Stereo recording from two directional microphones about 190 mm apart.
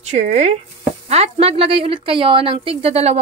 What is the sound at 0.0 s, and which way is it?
A woman's voice, 35° right (ahead or behind).